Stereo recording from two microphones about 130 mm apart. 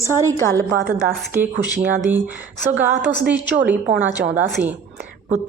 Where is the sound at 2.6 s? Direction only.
15° right (ahead or behind).